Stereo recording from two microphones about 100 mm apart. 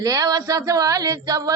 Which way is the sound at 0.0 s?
35° right (ahead or behind).